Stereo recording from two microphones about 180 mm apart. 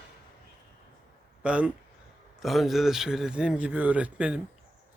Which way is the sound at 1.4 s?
5° right (ahead or behind).